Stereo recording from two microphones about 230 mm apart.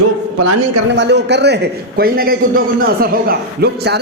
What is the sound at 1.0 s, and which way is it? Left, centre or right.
A man's voice, right.